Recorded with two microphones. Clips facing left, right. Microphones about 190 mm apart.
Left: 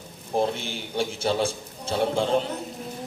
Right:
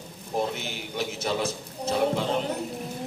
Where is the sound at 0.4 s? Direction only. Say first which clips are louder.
Left 3 dB; 30° left (ahead or behind).